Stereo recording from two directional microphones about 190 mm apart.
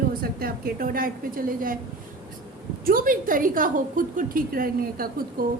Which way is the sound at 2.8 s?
45° right (ahead or behind).